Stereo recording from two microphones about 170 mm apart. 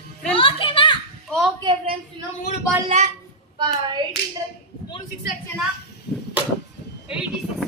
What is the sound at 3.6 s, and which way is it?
Hands, 25° right (ahead or behind).